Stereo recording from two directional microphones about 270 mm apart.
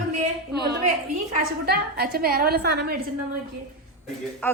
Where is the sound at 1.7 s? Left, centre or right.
Right.